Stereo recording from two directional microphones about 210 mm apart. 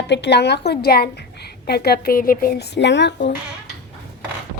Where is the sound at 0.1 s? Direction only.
55° left (ahead or behind).